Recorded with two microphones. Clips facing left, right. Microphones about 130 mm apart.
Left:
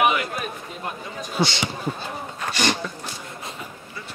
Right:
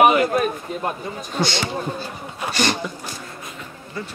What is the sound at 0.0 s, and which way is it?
Speech, 45° right (ahead or behind).